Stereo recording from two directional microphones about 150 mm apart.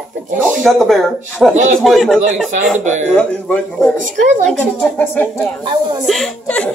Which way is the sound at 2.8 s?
55° right (ahead or behind).